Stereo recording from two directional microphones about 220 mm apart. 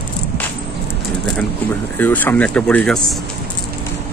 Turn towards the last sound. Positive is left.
turn(degrees=5)  # may be behind; listen again after turning